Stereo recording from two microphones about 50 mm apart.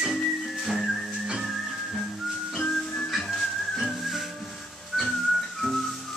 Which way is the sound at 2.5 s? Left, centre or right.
Centre.